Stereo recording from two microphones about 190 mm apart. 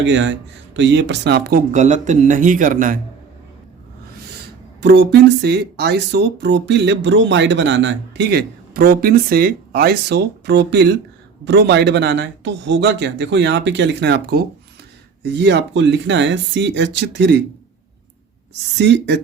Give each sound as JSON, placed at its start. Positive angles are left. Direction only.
{"t": 0.0, "sound": "speech", "side_deg": -75}
{"t": 4.8, "sound": "speech", "side_deg": -65}
{"t": 18.8, "sound": "speech", "side_deg": -65}